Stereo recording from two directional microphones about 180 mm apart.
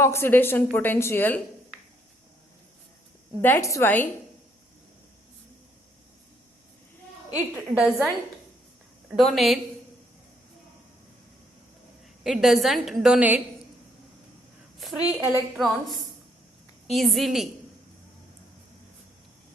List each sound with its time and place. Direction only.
0.0 s a woman's voice: 15° left (ahead or behind)
3.4 s a woman's voice: 15° left (ahead or behind)
7.3 s a woman's voice: 5° right (ahead or behind)
12.2 s a woman's voice: centre (ahead or behind)
14.8 s a woman's voice: centre (ahead or behind)
15.2 s a woman's voice: 20° right (ahead or behind)
15.5 s a woman's voice: centre (ahead or behind)